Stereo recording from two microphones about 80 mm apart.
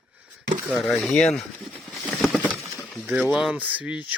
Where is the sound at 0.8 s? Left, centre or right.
Centre.